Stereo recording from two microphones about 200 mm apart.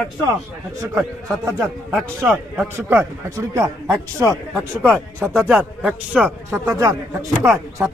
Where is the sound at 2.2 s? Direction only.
10° right (ahead or behind).